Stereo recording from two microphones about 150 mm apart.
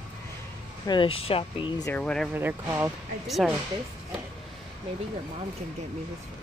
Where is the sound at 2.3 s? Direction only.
15° right (ahead or behind).